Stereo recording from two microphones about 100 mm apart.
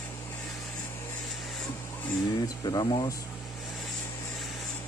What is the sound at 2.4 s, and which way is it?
Speech, 40° left (ahead or behind).